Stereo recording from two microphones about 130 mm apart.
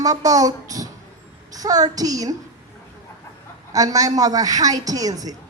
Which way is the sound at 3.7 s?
30° right (ahead or behind).